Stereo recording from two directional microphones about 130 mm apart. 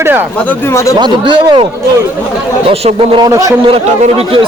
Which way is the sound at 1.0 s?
35° right (ahead or behind).